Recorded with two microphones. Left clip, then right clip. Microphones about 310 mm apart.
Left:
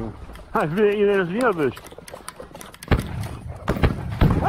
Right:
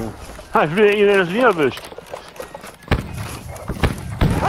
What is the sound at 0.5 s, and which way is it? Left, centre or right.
Speech, right.